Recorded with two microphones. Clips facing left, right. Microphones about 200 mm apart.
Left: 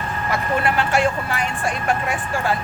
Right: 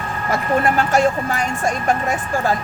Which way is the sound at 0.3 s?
45° right (ahead or behind).